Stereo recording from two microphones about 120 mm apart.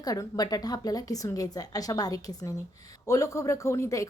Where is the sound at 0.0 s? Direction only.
30° left (ahead or behind).